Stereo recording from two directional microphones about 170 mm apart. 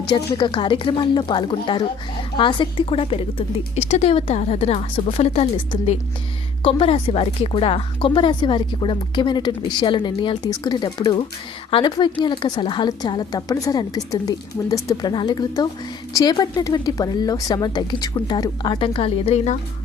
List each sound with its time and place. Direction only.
0.1 s a woman's voice: 30° left (ahead or behind)